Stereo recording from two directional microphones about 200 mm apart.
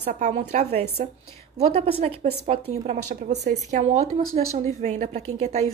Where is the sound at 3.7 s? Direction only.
35° right (ahead or behind).